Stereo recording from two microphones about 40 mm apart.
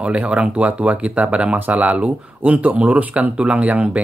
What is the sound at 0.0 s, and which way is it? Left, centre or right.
Speech, right.